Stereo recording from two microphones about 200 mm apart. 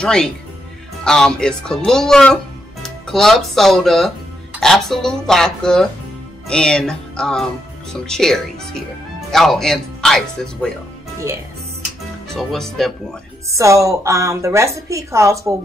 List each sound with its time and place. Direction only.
0.0 s speech: 5° left (ahead or behind)
6.4 s music: 5° left (ahead or behind)
7.9 s speech: 5° left (ahead or behind)
12.4 s speech: centre (ahead or behind)
13.6 s a woman's voice: 15° right (ahead or behind)